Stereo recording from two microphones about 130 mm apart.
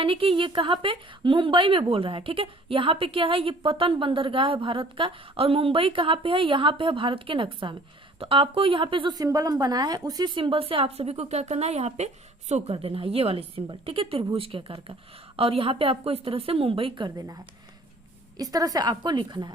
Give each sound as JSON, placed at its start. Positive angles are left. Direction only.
{"t": 0.0, "sound": "a woman's voice", "side_deg": -45}